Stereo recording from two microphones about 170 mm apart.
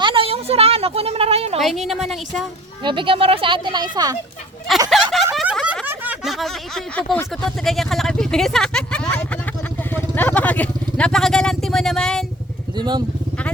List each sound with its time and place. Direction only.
0.0 s a sound: 30° right (ahead or behind)
1.5 s speech: centre (ahead or behind)
2.8 s speech: 30° right (ahead or behind)
4.7 s speech: centre (ahead or behind)
5.1 s a sound: centre (ahead or behind)
7.2 s speech: 5° left (ahead or behind)
12.7 s speech: 25° right (ahead or behind)